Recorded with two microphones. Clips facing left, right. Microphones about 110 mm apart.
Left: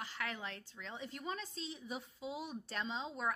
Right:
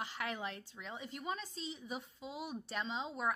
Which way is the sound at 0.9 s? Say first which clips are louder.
Right 1 dB; 5° right (ahead or behind).